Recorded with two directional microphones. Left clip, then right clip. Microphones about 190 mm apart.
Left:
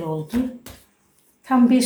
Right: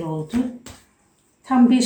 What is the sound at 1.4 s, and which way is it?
Speech, 20° left (ahead or behind).